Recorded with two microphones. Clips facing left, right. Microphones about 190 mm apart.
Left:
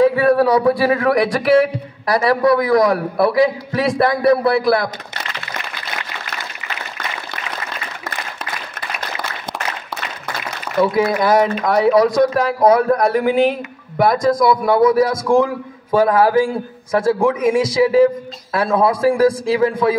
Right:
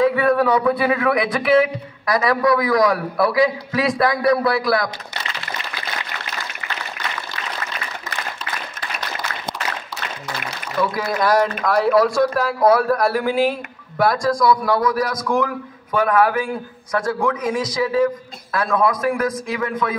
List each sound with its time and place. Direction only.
0.1 s a man's voice: 30° left (ahead or behind)
10.8 s speech: 25° left (ahead or behind)